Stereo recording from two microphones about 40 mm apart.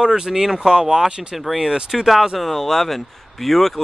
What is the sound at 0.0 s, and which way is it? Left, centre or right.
Speech, right.